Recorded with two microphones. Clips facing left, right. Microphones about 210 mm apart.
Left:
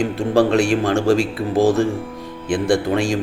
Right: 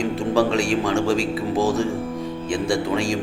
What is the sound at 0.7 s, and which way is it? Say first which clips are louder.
A man's voice: left 4 dB; 60° left (ahead or behind).